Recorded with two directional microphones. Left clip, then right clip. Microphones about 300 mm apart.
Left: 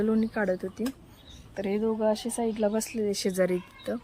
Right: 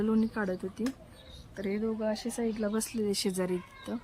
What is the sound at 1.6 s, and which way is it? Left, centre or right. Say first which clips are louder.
Speech: left 6 dB; left.